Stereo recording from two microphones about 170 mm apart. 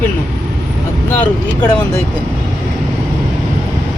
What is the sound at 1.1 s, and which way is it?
Speech, 10° left (ahead or behind).